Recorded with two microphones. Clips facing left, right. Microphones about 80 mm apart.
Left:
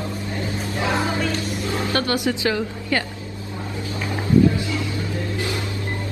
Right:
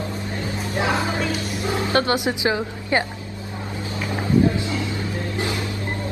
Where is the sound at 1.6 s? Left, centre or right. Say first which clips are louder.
Right 4 dB; right.